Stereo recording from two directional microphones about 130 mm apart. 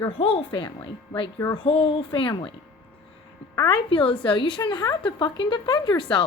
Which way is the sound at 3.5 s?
30° left (ahead or behind).